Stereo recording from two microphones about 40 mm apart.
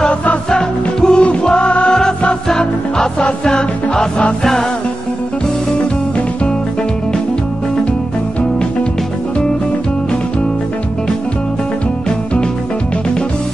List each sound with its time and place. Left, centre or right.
0.1 s music: left
0.5 s music: centre
2.4 s music: centre
3.2 s music: left
3.5 s music: centre